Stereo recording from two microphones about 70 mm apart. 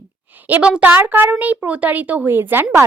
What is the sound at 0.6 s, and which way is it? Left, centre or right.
Speech, centre.